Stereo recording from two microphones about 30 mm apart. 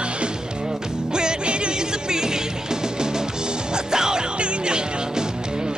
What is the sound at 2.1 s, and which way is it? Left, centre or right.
Music, right.